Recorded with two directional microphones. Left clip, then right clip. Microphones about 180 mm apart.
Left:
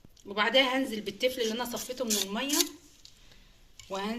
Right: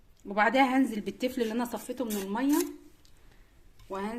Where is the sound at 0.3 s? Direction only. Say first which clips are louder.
Right 1 dB; 55° right (ahead or behind).